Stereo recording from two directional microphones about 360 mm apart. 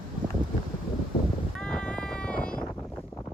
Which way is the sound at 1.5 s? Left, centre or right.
Centre.